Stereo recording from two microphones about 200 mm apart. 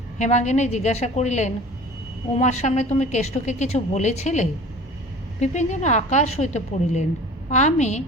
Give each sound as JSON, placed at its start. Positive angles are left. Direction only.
{"t": 0.2, "sound": "a woman's voice", "side_deg": 35}